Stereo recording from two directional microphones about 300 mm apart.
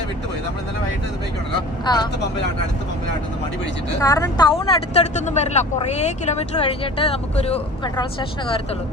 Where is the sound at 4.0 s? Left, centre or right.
Centre.